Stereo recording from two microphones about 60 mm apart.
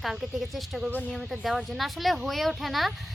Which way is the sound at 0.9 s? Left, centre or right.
Left.